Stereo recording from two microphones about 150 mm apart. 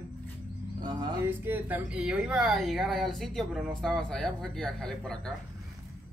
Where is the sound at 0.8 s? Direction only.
30° right (ahead or behind).